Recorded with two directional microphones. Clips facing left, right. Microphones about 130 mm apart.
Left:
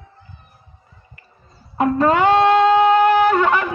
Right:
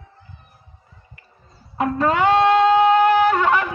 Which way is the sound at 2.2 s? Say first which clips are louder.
Even; 65° left (ahead or behind).